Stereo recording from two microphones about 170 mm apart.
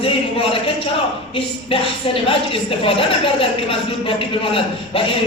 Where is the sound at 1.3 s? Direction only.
35° left (ahead or behind).